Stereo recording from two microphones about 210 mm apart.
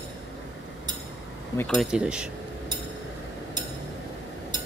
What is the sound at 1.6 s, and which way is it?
Speech, 5° left (ahead or behind).